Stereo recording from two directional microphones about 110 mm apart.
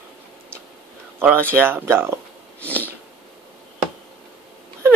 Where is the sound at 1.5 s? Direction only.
20° right (ahead or behind).